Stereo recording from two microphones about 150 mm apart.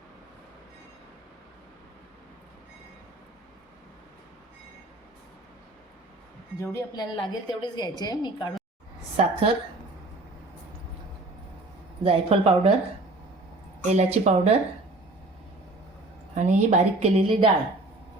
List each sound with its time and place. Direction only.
6.6 s a woman's voice: 25° left (ahead or behind)
9.1 s speech: 35° right (ahead or behind)
12.0 s speech: 35° right (ahead or behind)
13.9 s a woman's voice: 45° right (ahead or behind)
16.3 s a woman's voice: 50° right (ahead or behind)